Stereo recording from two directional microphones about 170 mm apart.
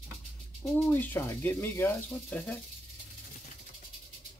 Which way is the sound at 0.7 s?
10° left (ahead or behind).